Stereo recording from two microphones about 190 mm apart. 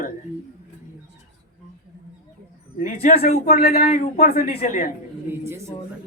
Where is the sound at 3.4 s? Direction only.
50° left (ahead or behind).